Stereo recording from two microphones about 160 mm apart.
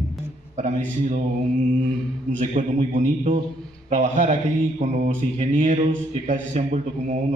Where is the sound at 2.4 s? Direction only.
50° right (ahead or behind).